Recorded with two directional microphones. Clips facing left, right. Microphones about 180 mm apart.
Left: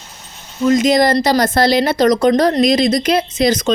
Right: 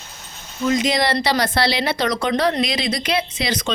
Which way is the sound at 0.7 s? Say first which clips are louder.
Left 7 dB; 45° left (ahead or behind).